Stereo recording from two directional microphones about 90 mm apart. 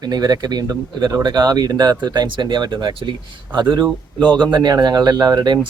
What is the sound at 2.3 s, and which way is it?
Speech, 60° right (ahead or behind).